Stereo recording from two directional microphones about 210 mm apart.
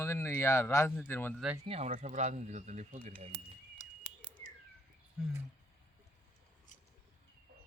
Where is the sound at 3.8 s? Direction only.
35° left (ahead or behind).